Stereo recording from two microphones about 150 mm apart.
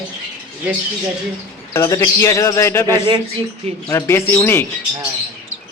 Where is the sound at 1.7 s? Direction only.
20° left (ahead or behind).